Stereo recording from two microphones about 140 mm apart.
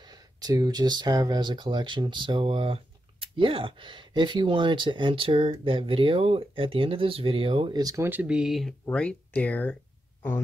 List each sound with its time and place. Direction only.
0.0 s speech: 30° right (ahead or behind)
8.1 s speech: 10° right (ahead or behind)
8.8 s speech: 10° left (ahead or behind)